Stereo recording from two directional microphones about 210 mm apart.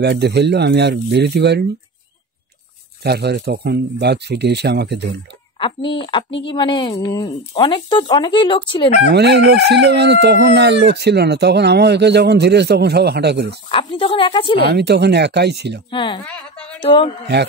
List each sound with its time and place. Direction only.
0.0 s chicken: 50° right (ahead or behind)
3.0 s chicken: 50° right (ahead or behind)
5.6 s speech: 25° left (ahead or behind)
9.1 s chicken: 50° right (ahead or behind)
13.7 s speech: 25° left (ahead or behind)
14.7 s chicken: 50° right (ahead or behind)
15.9 s speech: 20° left (ahead or behind)
16.3 s a woman's voice: 5° left (ahead or behind)
16.8 s speech: 25° left (ahead or behind)